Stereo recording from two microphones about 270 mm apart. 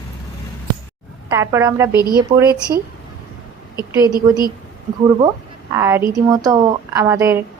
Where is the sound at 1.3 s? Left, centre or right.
Centre.